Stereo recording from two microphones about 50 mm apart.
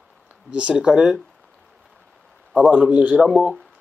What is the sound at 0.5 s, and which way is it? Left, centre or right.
Speech, centre.